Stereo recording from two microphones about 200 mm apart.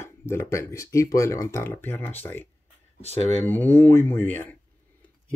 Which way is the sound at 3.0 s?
35° right (ahead or behind).